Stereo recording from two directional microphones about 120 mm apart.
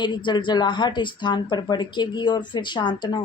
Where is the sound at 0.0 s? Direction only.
40° left (ahead or behind).